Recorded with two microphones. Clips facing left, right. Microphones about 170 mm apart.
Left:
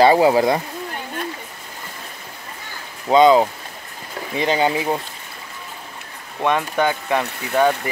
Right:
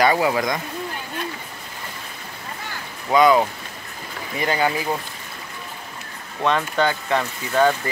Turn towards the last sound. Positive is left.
turn(degrees=15)  # may be behind; listen again after turning